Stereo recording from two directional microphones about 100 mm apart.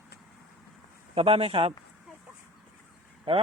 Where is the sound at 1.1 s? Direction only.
80° right; by 1.7 s 65° right (ahead or behind).